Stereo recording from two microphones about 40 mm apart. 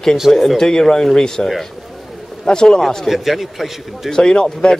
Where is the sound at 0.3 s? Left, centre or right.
Centre.